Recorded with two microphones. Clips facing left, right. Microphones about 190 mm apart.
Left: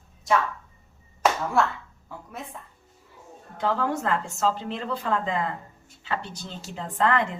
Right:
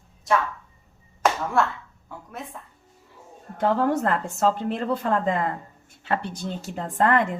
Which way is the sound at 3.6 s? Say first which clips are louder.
Right 4 dB; 50° right (ahead or behind).